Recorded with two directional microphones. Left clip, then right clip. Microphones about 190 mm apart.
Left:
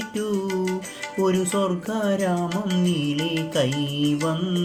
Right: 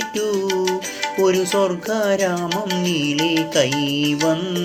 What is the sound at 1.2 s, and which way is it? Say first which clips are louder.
Music: right 5 dB; 20° left (ahead or behind).